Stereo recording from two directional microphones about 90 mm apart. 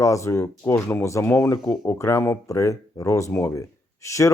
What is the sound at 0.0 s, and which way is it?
Speech, 35° left (ahead or behind).